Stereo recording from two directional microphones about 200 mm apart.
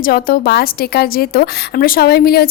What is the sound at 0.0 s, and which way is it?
A woman's voice, 45° left (ahead or behind).